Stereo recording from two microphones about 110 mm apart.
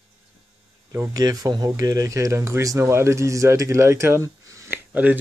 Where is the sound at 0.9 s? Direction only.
35° right (ahead or behind).